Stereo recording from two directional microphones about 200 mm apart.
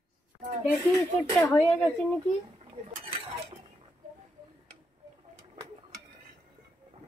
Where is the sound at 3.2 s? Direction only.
30° right (ahead or behind).